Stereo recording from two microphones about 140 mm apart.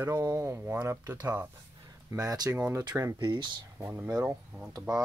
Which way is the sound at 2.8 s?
25° right (ahead or behind).